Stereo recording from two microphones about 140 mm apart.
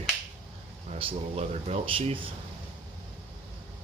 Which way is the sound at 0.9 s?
45° right (ahead or behind).